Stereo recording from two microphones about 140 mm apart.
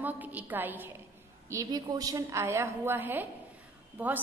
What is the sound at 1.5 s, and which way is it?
A woman's voice, 25° right (ahead or behind).